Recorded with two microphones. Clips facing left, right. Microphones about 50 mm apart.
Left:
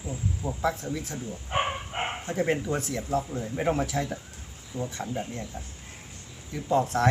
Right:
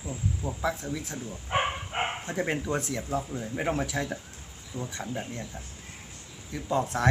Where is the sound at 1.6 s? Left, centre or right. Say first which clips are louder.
Even; centre.